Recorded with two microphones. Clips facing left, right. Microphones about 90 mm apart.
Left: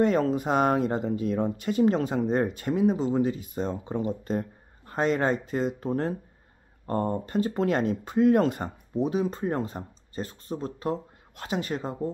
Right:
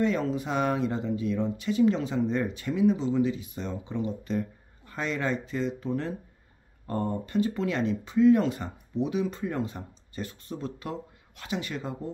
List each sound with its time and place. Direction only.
0.0 s speech: 45° left (ahead or behind)